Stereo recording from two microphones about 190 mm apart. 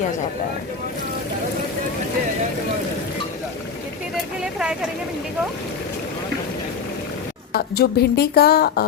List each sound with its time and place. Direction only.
7.5 s speech: 55° left (ahead or behind)